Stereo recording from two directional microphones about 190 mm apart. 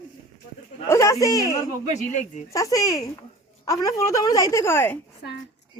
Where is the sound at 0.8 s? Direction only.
15° left (ahead or behind).